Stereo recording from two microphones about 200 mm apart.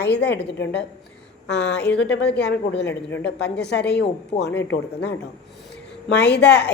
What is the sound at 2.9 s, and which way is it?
Speech, 10° left (ahead or behind).